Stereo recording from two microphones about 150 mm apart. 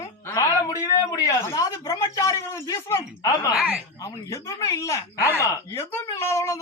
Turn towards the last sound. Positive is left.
turn(degrees=20)  # may be behind; listen again after turning